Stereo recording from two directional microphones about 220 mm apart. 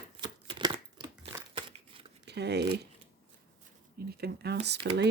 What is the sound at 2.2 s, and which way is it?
Crumpling, 50° right (ahead or behind).